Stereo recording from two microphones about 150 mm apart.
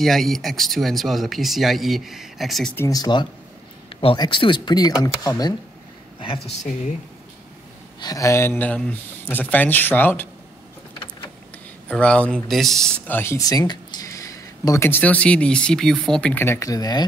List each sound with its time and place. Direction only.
0.0 s speech: centre (ahead or behind)
2.9 s speech: 30° left (ahead or behind)
6.1 s speech: 35° left (ahead or behind)
8.0 s speech: 25° left (ahead or behind)
11.9 s speech: 10° left (ahead or behind)
13.0 s speech: 15° left (ahead or behind)